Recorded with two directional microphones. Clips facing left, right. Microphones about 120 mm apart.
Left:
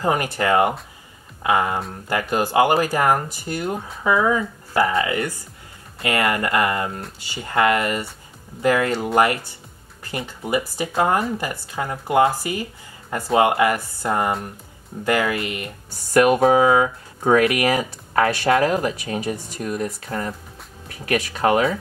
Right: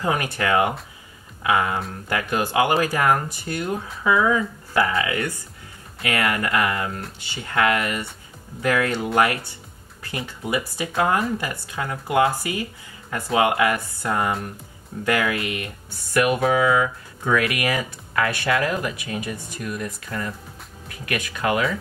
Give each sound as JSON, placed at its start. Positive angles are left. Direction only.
{"t": 0.0, "sound": "speech", "side_deg": 30}
{"t": 2.9, "sound": "speech", "side_deg": 20}
{"t": 16.1, "sound": "speech", "side_deg": 45}